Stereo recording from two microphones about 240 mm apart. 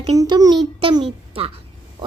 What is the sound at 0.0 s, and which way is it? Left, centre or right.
A child's voice, centre.